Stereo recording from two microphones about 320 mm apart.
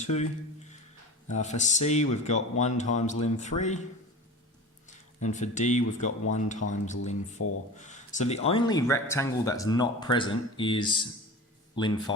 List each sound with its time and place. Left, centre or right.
0.0 s speech: left
5.2 s speech: left
7.3 s speech: left
7.8 s a man's voice: left